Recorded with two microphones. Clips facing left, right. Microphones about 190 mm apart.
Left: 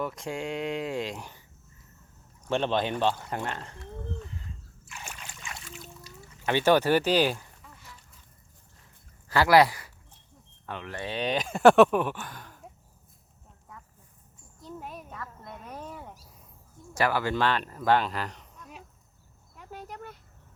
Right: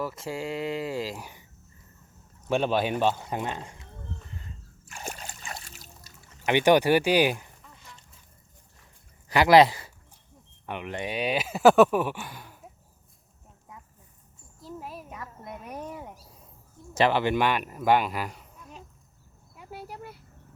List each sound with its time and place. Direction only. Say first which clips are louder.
0.0 s speech: even; 5° right (ahead or behind)
2.5 s speech: right 2 dB; 10° right (ahead or behind)
4.9 s splash: right 5 dB; 40° right (ahead or behind)
6.4 s speech: right 2 dB; 15° right (ahead or behind)
9.3 s speech: right 3 dB; 20° right (ahead or behind)
14.6 s a sound: right 1 dB; 5° right (ahead or behind)
16.9 s speech: right 4 dB; 20° right (ahead or behind)
19.5 s cricket: right 1 dB; 10° right (ahead or behind)